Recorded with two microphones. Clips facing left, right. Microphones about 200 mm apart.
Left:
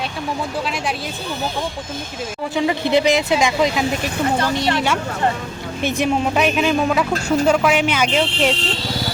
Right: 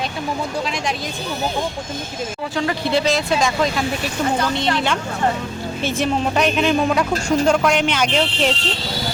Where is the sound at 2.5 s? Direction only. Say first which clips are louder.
Left 3 dB; 15° left (ahead or behind).